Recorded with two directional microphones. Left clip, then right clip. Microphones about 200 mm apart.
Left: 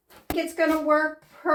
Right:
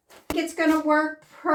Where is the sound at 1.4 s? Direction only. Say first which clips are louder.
Even; 25° right (ahead or behind).